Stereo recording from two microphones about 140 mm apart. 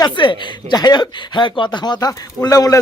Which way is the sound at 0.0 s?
35° left (ahead or behind).